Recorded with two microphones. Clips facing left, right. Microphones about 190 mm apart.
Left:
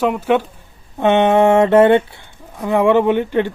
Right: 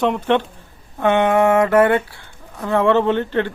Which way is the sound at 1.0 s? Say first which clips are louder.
Left 3 dB; 25° left (ahead or behind).